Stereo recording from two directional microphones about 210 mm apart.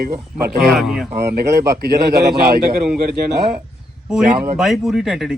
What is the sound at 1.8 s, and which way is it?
Speech, 50° right (ahead or behind).